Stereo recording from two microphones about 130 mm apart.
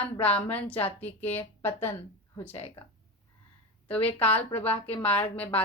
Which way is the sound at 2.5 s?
50° left (ahead or behind).